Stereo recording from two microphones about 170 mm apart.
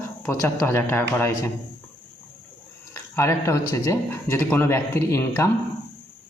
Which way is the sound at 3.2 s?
15° left (ahead or behind).